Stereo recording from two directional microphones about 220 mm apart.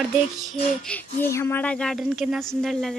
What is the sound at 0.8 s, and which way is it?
Speech, 10° left (ahead or behind).